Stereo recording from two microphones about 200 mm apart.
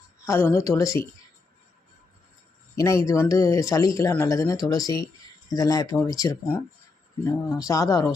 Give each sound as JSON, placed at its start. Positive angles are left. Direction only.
{"t": 0.3, "sound": "speech", "side_deg": 10}
{"t": 2.7, "sound": "speech", "side_deg": 15}